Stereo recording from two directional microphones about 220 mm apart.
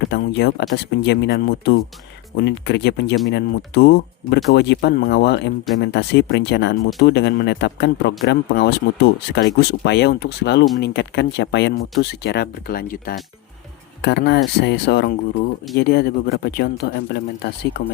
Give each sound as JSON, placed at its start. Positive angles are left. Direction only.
{"t": 0.1, "sound": "speech", "side_deg": 50}